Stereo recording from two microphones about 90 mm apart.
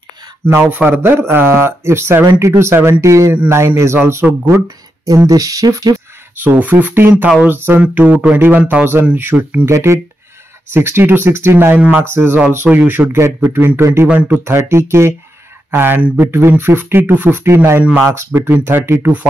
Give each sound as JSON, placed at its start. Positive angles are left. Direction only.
{"t": 0.5, "sound": "speech", "side_deg": -25}
{"t": 6.4, "sound": "speech", "side_deg": -20}
{"t": 14.0, "sound": "speech", "side_deg": -15}
{"t": 14.4, "sound": "speech", "side_deg": -30}